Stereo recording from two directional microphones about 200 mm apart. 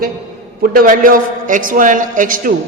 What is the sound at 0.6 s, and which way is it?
A man's voice, 45° right (ahead or behind).